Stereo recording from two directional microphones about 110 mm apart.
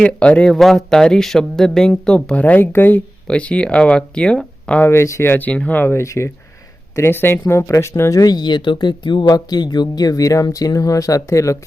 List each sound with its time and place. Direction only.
0.0 s speech: 10° left (ahead or behind)
4.9 s speech: 25° left (ahead or behind)